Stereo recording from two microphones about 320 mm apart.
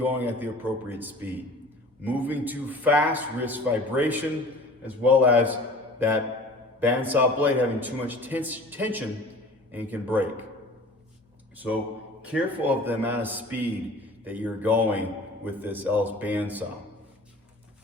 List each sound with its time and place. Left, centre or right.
0.0 s a man's voice: centre
6.7 s a man's voice: centre
11.5 s a man's voice: centre